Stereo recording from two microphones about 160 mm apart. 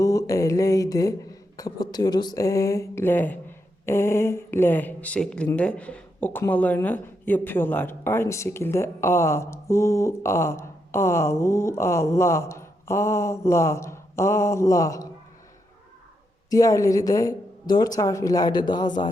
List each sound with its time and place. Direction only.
0.0 s speech: 20° left (ahead or behind)
16.5 s speech: 20° left (ahead or behind)